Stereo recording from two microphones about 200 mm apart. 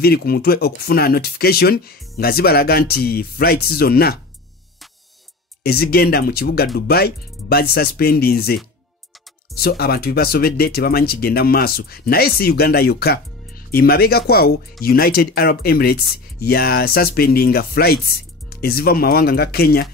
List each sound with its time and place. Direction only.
0.0 s speech: 50° left (ahead or behind)
5.6 s speech: 50° left (ahead or behind)
9.6 s speech: 50° left (ahead or behind)